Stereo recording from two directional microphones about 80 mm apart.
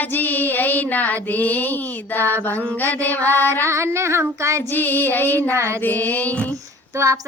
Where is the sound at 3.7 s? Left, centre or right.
Right.